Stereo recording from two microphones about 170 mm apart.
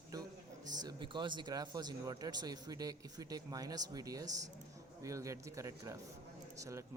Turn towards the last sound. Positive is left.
turn(degrees=-20)  # may be behind; listen again after turning